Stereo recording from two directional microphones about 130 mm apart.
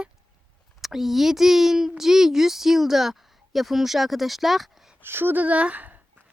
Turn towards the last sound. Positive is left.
turn(degrees=-10)  # may be behind; listen again after turning